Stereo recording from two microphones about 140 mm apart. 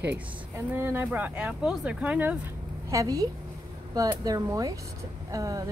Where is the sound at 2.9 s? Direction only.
25° right (ahead or behind).